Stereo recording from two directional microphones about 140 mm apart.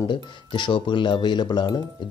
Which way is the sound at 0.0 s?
35° left (ahead or behind).